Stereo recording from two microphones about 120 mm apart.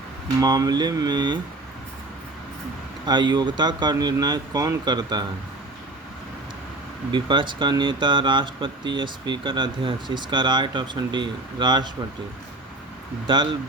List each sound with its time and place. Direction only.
0.3 s speech: 30° right (ahead or behind)
3.1 s speech: 40° right (ahead or behind)
7.1 s speech: 40° right (ahead or behind)
13.2 s speech: 40° right (ahead or behind)